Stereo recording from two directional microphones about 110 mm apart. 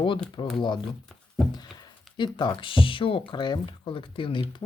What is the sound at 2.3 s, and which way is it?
Speech, 45° left (ahead or behind).